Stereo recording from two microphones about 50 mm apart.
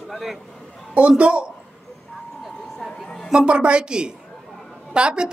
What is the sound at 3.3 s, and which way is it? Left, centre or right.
Speech, centre.